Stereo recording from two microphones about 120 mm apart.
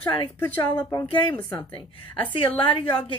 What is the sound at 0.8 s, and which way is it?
Speech, 30° left (ahead or behind).